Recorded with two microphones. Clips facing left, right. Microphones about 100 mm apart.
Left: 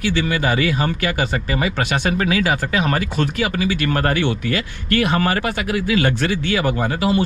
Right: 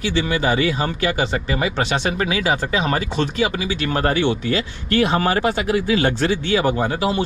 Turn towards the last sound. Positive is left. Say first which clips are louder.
# left 1 dB
turn(degrees=-20)  # may be behind; listen again after turning